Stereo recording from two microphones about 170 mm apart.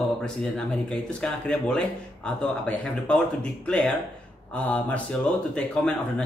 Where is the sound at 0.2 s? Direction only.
5° left (ahead or behind).